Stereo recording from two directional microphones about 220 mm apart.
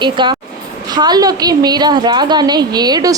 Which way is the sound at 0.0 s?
20° right (ahead or behind).